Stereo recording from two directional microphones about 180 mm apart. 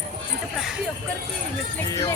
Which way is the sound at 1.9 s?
20° left (ahead or behind).